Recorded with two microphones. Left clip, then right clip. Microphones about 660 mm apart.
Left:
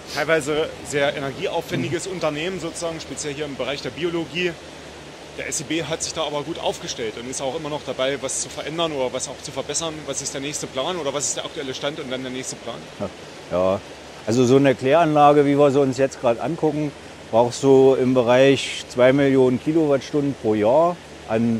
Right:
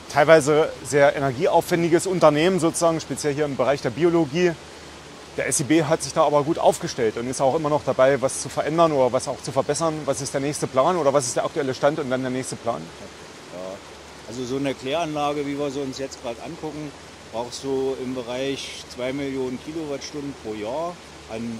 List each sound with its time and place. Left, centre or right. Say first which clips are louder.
0.1 s speech: right 6 dB; right
14.3 s speech: left 11 dB; left
17.4 s speech: left 11 dB; left